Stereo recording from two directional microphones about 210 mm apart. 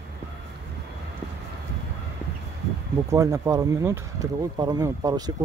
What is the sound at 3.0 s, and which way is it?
Speech, 15° right (ahead or behind).